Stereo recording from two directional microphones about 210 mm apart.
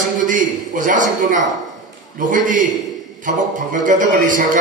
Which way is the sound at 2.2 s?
40° right (ahead or behind).